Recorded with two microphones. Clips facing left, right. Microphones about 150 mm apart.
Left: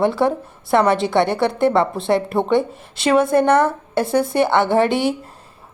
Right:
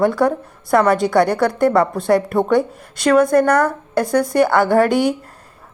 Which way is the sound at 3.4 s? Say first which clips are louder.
Even; 25° left (ahead or behind).